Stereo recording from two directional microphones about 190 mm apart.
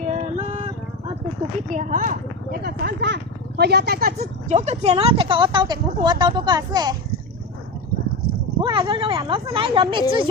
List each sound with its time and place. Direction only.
0.1 s a sound: 35° right (ahead or behind)
1.7 s speech: 40° right (ahead or behind)
4.5 s speech: 35° right (ahead or behind)
8.6 s speech: 25° right (ahead or behind)